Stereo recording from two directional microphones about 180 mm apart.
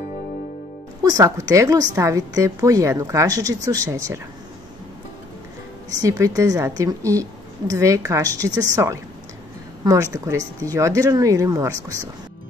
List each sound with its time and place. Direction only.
1.0 s a woman's voice: 20° right (ahead or behind)
5.9 s a woman's voice: 15° right (ahead or behind)
10.1 s a woman's voice: 20° right (ahead or behind)